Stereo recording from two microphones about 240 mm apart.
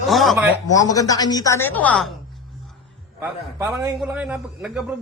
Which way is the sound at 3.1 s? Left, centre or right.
Centre.